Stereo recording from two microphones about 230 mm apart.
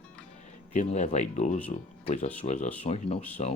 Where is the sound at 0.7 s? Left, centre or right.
Left.